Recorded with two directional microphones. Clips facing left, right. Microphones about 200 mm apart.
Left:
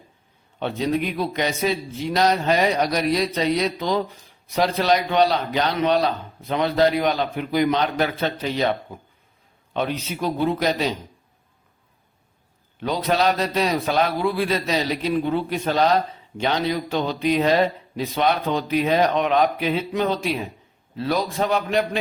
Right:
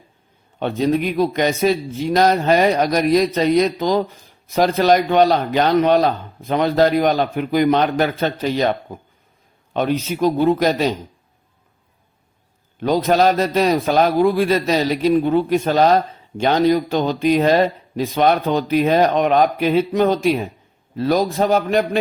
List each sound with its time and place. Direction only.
0.6 s a man's voice: 45° right (ahead or behind)
12.8 s a man's voice: 45° right (ahead or behind)